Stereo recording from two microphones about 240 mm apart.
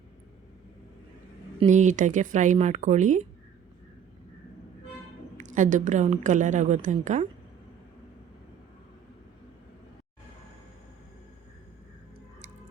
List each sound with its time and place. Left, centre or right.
1.5 s a woman's voice: right
5.4 s a woman's voice: right